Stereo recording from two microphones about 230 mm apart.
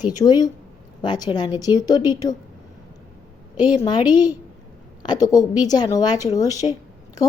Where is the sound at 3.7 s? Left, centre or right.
Centre.